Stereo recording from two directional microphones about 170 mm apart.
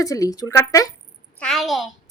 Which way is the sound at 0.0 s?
20° left (ahead or behind).